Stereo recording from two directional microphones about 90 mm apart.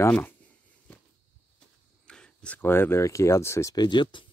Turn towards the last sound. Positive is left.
turn(degrees=60)  # may be behind; listen again after turning